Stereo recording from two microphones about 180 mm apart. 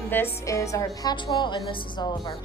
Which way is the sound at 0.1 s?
15° left (ahead or behind).